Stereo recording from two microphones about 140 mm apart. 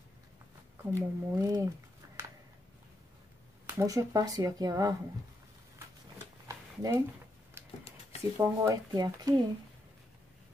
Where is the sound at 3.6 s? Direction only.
20° right (ahead or behind).